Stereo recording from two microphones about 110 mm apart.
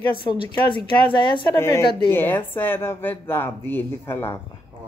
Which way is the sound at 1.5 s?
25° left (ahead or behind).